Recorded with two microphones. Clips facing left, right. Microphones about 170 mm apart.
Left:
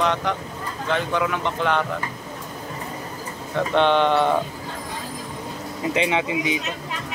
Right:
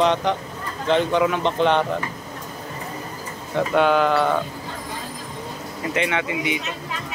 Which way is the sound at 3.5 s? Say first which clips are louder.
Right 1 dB; 5° right (ahead or behind).